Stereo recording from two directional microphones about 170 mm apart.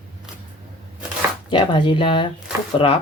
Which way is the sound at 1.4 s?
30° left (ahead or behind).